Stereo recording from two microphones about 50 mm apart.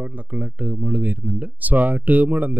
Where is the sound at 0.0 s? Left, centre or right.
Right.